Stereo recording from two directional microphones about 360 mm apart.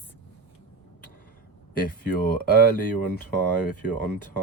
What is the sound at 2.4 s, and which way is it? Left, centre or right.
Speech, left.